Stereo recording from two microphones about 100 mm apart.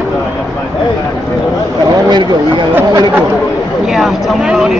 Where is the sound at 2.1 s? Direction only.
50° right (ahead or behind).